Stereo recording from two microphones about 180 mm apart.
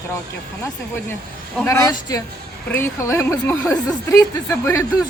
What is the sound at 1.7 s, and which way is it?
Speech, 20° left (ahead or behind).